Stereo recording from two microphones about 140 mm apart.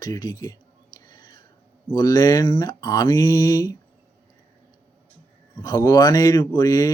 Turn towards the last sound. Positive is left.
turn(degrees=25)  # may be behind; listen again after turning